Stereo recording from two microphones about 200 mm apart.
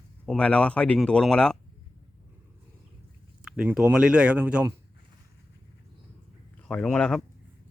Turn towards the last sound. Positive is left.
turn(degrees=5)  # may be behind; listen again after turning